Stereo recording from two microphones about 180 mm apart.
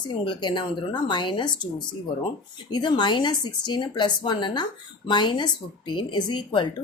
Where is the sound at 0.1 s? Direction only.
25° left (ahead or behind).